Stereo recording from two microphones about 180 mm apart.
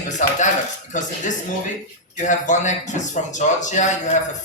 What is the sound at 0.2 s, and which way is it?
Speech, 40° left (ahead or behind).